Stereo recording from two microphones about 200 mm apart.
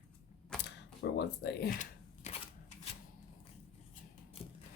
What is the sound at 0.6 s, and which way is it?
Camera, 60° left (ahead or behind).